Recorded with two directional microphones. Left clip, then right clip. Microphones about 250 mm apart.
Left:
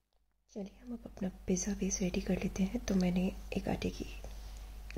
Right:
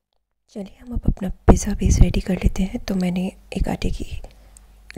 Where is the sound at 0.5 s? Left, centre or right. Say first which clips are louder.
Right 11 dB; right.